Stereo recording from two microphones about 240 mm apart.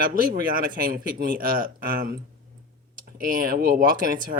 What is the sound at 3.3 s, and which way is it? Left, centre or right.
Speech, right.